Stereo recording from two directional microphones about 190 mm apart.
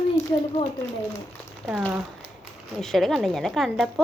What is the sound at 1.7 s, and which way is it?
Speech, 5° right (ahead or behind).